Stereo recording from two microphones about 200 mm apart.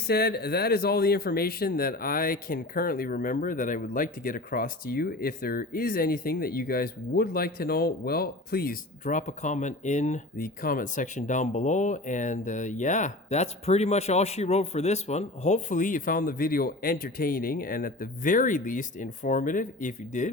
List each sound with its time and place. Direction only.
0.1 s speech: 50° left (ahead or behind)